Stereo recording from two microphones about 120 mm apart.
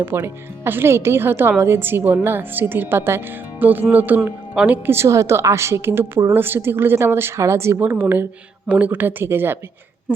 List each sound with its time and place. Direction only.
0.1 s a woman's voice: 20° right (ahead or behind)